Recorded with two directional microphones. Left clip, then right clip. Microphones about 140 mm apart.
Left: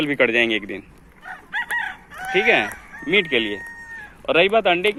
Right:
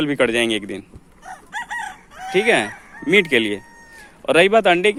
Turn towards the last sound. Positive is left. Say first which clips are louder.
# right 3 dB
turn(degrees=-50)  # may be behind; listen again after turning